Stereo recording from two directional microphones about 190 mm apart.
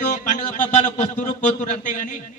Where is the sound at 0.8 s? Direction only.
45° left (ahead or behind).